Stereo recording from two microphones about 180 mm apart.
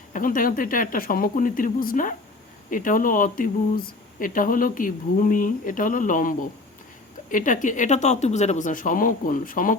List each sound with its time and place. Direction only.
0.1 s speech: 50° left (ahead or behind)